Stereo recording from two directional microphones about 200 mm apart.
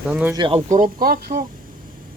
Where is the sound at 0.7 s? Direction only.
40° right (ahead or behind).